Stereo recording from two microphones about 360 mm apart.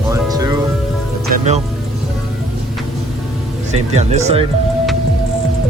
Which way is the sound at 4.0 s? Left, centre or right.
Centre.